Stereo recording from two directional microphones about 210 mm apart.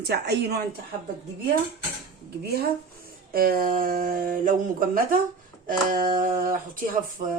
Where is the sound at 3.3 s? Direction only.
45° right (ahead or behind).